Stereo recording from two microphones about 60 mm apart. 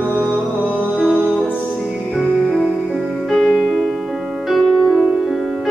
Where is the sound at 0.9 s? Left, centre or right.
Centre.